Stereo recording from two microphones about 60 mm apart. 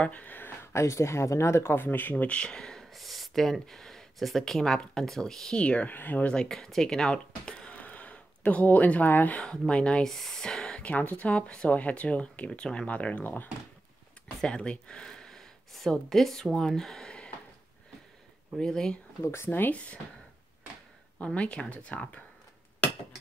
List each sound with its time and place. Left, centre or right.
0.0 s a sound: left
0.7 s speech: left
2.3 s speech: centre
5.6 s speech: centre
6.5 s speech: centre; by 9.4 s left
9.4 s speech: centre
10.0 s speech: centre
10.8 s speech: left
14.4 s speech: centre
18.6 s speech: centre
19.2 s speech: left
19.7 s speech: left
21.2 s speech: centre